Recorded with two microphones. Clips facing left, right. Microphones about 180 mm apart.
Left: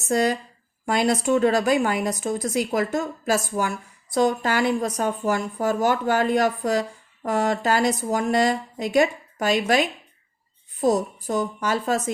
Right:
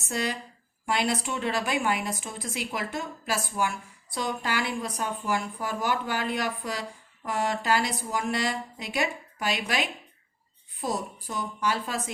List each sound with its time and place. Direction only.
0.1 s a woman's voice: 45° left (ahead or behind)